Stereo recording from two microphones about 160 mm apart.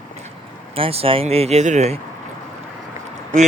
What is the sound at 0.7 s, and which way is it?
Speech, 35° right (ahead or behind).